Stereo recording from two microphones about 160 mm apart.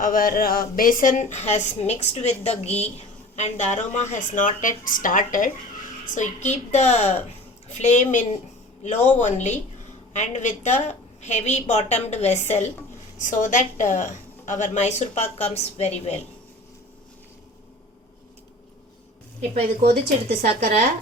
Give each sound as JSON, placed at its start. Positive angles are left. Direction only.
{"t": 0.0, "sound": "a woman's voice", "side_deg": 60}
{"t": 19.8, "sound": "speech", "side_deg": -70}